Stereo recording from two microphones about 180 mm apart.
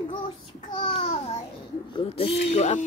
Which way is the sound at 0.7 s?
35° left (ahead or behind).